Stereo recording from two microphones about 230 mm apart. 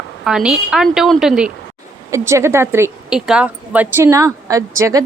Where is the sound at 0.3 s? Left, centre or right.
Centre.